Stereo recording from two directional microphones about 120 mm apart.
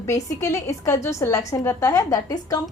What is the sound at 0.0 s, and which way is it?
A woman's voice, 25° left (ahead or behind).